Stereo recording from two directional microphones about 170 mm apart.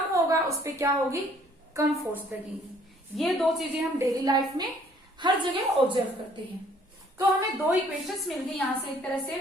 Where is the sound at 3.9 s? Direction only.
20° right (ahead or behind).